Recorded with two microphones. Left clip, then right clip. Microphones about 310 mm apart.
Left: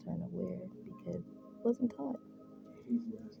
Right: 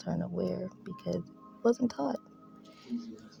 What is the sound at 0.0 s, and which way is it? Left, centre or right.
Music, right.